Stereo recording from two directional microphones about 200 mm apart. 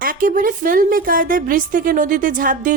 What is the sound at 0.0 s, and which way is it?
A woman's voice, 45° right (ahead or behind).